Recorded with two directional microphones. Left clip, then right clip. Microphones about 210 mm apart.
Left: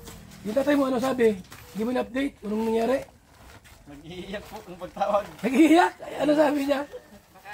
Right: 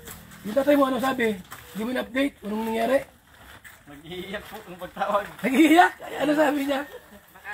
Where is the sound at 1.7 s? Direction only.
15° right (ahead or behind).